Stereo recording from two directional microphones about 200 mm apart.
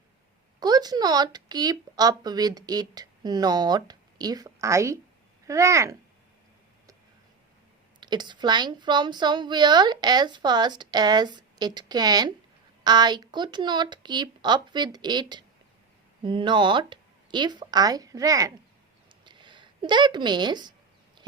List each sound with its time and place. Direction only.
0.6 s a woman's voice: 20° right (ahead or behind)
8.0 s a woman's voice: 20° right (ahead or behind)
19.2 s a sound: 25° right (ahead or behind)